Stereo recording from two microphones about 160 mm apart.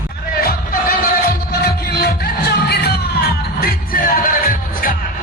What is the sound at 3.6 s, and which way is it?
Music, 65° left (ahead or behind).